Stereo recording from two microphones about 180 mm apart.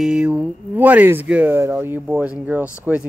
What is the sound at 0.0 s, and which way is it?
Speech, 5° right (ahead or behind).